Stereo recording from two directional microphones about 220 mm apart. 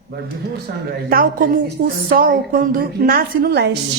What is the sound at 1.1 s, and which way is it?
A woman's voice, 40° right (ahead or behind).